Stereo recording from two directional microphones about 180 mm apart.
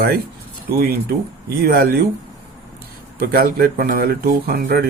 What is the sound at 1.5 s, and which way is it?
Speech, 60° right (ahead or behind).